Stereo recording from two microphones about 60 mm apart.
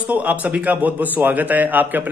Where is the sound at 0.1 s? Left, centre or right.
Right.